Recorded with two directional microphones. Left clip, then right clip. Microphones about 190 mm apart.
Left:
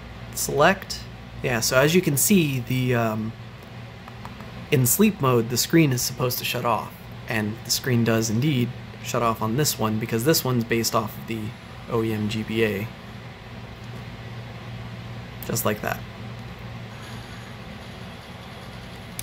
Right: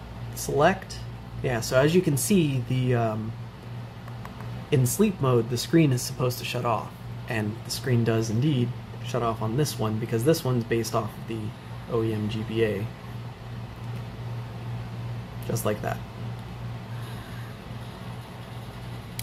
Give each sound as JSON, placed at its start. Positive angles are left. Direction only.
{"t": 1.4, "sound": "speech", "side_deg": 10}
{"t": 4.6, "sound": "speech", "side_deg": 10}
{"t": 15.4, "sound": "speech", "side_deg": 10}